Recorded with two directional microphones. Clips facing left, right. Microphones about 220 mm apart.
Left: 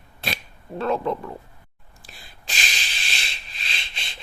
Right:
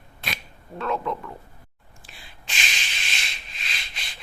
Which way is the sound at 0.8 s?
35° left (ahead or behind).